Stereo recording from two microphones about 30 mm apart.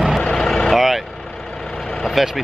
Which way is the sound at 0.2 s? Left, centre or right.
Left.